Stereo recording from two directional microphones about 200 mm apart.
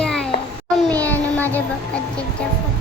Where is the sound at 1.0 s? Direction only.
10° left (ahead or behind).